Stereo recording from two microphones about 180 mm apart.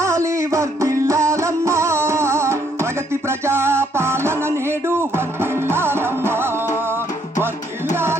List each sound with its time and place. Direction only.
0.0 s music: 15° right (ahead or behind)